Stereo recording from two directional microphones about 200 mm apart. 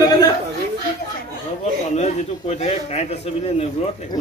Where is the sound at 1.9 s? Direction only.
35° left (ahead or behind).